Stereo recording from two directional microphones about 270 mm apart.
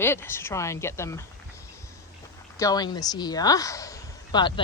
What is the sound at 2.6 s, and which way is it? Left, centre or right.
Speech, centre.